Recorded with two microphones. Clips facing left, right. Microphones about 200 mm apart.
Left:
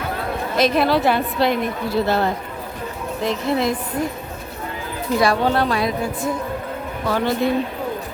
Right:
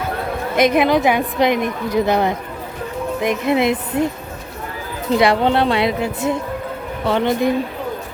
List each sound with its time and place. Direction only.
0.5 s a woman's voice: 20° right (ahead or behind)
5.2 s a woman's voice: 25° right (ahead or behind)